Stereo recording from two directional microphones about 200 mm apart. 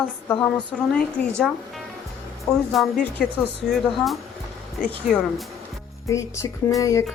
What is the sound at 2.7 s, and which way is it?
A woman's voice, centre (ahead or behind).